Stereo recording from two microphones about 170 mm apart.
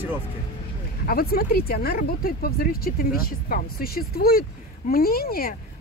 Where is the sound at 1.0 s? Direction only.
60° left (ahead or behind).